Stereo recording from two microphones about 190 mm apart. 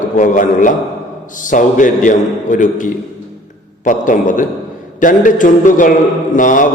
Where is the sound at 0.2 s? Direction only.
40° left (ahead or behind).